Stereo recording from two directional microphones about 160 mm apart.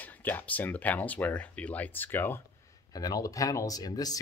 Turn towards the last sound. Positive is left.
turn(degrees=25)  # may be behind; listen again after turning